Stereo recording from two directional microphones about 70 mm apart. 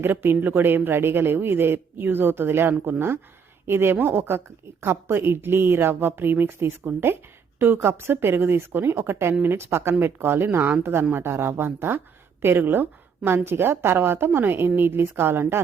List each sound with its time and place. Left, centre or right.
0.0 s a woman's voice: right